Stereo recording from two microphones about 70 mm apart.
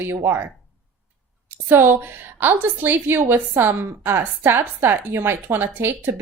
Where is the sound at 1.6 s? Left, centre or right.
Right.